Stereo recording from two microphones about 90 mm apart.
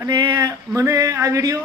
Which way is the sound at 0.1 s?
50° right (ahead or behind).